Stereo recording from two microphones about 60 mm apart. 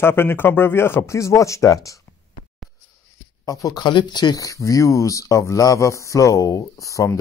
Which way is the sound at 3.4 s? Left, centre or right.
Left.